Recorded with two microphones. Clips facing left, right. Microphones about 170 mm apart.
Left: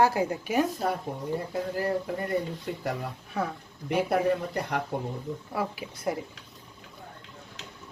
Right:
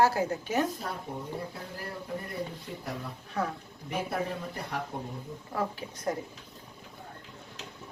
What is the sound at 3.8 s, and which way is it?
Speech, 75° left (ahead or behind).